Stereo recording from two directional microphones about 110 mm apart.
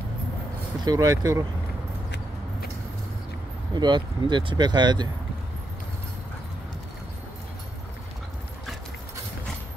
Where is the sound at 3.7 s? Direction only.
45° right (ahead or behind).